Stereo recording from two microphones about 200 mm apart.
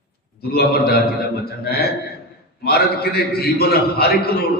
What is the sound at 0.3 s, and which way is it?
A man's voice, 50° left (ahead or behind).